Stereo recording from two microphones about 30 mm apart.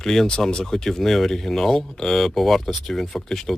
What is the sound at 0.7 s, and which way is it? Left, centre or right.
Speech, centre.